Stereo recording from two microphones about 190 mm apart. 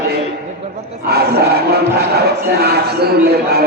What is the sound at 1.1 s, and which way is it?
A man's voice, 55° right (ahead or behind).